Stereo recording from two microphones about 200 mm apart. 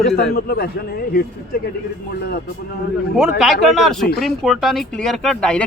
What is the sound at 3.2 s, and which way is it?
Speech, centre (ahead or behind).